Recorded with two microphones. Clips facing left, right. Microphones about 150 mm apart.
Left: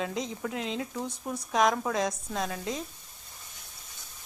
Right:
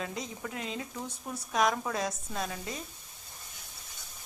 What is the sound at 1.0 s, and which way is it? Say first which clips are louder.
Speech: left 5 dB; 15° left (ahead or behind).